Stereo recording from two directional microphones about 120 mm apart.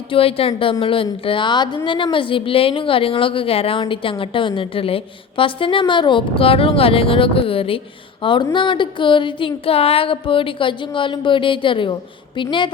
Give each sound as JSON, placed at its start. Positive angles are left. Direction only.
{"t": 0.1, "sound": "a woman's voice", "side_deg": 50}